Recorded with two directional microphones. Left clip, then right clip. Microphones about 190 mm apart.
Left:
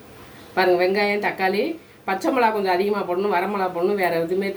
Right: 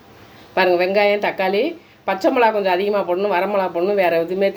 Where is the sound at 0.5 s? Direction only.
40° right (ahead or behind).